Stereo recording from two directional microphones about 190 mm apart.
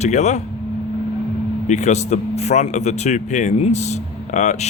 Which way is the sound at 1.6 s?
40° left (ahead or behind).